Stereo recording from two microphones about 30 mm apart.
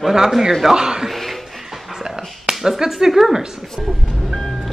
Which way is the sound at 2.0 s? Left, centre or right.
Centre.